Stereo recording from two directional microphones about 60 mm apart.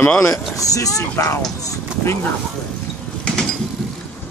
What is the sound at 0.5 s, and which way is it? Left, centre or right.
Speech, left.